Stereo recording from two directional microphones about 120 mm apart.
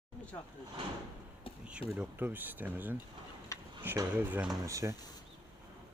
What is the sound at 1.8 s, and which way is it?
Speech, 50° left (ahead or behind).